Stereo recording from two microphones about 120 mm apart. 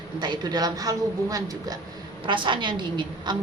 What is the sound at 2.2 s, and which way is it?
A man's voice, 45° right (ahead or behind).